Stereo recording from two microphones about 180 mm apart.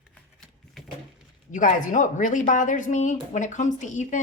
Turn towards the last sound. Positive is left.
turn(degrees=45)  # may be behind; listen again after turning